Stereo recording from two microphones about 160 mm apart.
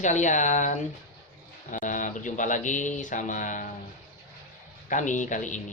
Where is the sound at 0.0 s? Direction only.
50° left (ahead or behind).